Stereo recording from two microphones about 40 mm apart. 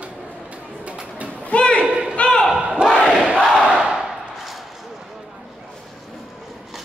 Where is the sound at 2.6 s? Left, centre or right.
Right.